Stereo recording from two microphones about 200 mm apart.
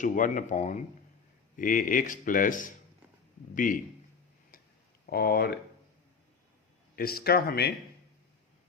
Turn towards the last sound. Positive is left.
turn(degrees=50)  # may be behind; listen again after turning